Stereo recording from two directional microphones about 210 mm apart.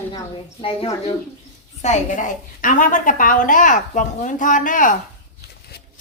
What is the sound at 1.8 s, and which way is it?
A woman's voice, 35° left (ahead or behind).